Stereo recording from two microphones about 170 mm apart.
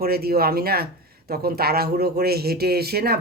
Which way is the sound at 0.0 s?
65° right (ahead or behind).